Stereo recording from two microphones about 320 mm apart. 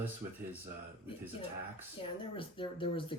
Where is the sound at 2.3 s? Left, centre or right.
Centre.